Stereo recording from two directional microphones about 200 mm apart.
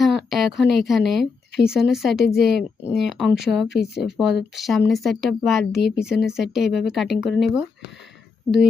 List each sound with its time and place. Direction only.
0.0 s speech: centre (ahead or behind)
3.7 s speech: 55° left (ahead or behind)
4.0 s speech: centre (ahead or behind)